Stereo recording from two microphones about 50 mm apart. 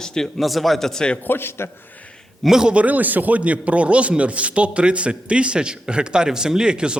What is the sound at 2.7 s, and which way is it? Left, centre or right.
Speech, right.